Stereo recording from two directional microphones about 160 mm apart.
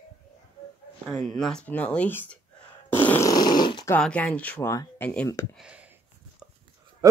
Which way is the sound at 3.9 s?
10° left (ahead or behind).